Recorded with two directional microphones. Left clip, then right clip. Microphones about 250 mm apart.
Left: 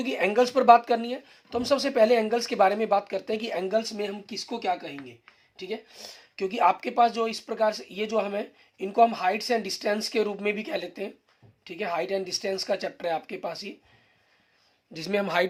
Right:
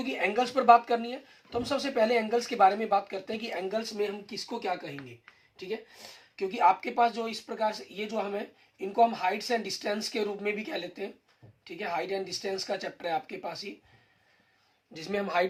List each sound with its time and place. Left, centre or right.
0.0 s speech: left
14.9 s speech: left